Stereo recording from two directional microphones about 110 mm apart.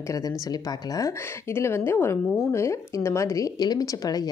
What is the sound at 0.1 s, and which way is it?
A woman's voice, 35° left (ahead or behind).